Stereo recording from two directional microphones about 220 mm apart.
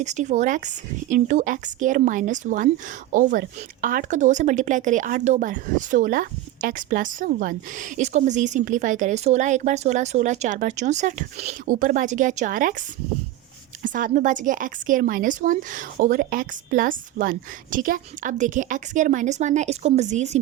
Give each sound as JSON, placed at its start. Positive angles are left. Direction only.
{"t": 0.0, "sound": "speech", "side_deg": -30}
{"t": 13.8, "sound": "speech", "side_deg": -35}